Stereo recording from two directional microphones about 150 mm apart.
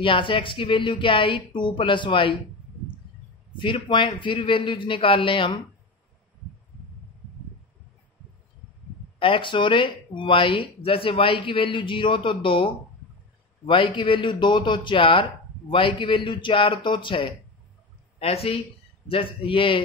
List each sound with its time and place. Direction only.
0.0 s speech: 35° left (ahead or behind)
3.5 s speech: 35° left (ahead or behind)
9.2 s speech: 35° left (ahead or behind)
13.7 s speech: 35° left (ahead or behind)